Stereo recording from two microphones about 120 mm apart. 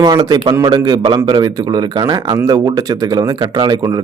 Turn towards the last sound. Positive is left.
turn(degrees=-35)  # may be behind; listen again after turning